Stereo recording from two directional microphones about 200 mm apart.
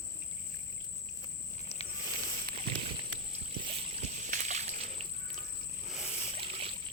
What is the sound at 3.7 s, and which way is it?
Splash, 35° right (ahead or behind).